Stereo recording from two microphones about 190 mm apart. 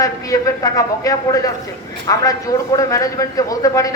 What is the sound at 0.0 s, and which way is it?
A man's voice, 20° left (ahead or behind).